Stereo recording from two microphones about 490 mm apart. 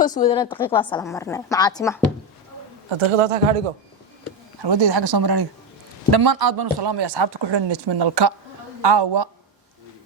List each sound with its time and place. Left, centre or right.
0.0 s a woman's voice: centre
3.1 s speech: right
4.6 s speech: right